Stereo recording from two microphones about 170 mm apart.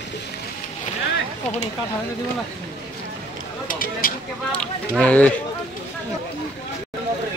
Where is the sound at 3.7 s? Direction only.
55° left (ahead or behind).